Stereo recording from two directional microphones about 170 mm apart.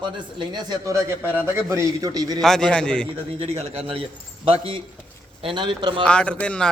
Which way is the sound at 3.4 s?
40° right (ahead or behind).